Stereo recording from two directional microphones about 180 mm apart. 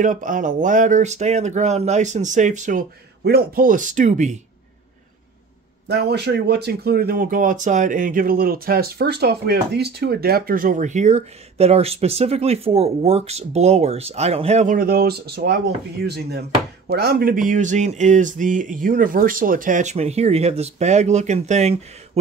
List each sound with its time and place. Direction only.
0.0 s speech: 45° right (ahead or behind)
3.3 s speech: 55° right (ahead or behind)
5.9 s speech: 65° right (ahead or behind); by 22.2 s 35° right (ahead or behind)